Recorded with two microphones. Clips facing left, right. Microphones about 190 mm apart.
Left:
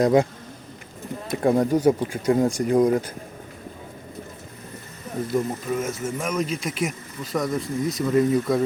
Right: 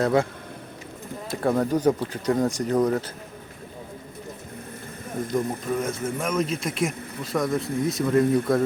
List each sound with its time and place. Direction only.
0.0 s speech: 15° left (ahead or behind)
1.3 s speech: 20° left (ahead or behind)
5.3 s speech: centre (ahead or behind)